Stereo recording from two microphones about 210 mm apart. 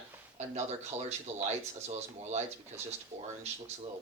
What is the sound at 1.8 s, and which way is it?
Speech, 30° right (ahead or behind).